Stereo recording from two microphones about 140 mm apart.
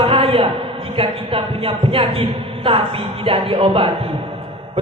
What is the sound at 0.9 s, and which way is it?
A man's voice, 40° right (ahead or behind).